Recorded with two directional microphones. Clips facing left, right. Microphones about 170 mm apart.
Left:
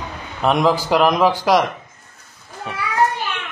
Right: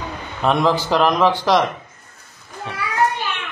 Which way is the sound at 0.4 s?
5° left (ahead or behind).